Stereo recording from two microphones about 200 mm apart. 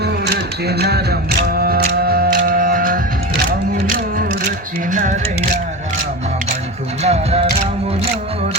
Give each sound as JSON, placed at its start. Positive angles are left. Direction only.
{"t": 0.0, "sound": "music", "side_deg": -55}
{"t": 4.9, "sound": "speech", "side_deg": -40}
{"t": 7.0, "sound": "music", "side_deg": -30}